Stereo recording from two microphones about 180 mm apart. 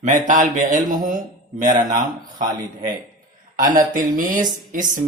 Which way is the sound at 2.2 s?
45° right (ahead or behind).